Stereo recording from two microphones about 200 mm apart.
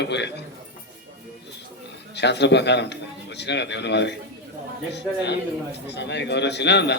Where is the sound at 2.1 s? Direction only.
60° left (ahead or behind).